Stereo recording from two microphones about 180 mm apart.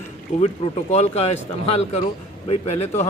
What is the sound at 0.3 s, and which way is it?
Speech, 35° left (ahead or behind).